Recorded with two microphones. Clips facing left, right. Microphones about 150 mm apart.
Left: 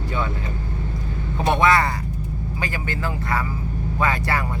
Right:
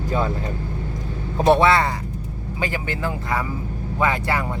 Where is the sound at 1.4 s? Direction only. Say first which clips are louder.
Right 3 dB; 30° right (ahead or behind).